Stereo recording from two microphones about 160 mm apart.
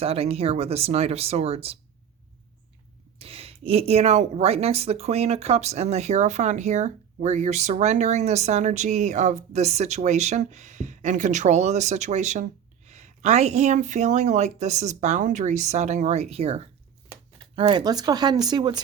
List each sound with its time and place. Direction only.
0.0 s speech: 40° right (ahead or behind)
3.2 s a woman's voice: 35° right (ahead or behind)